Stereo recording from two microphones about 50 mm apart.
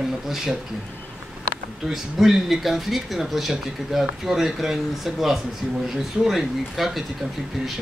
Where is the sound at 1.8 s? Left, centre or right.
Centre.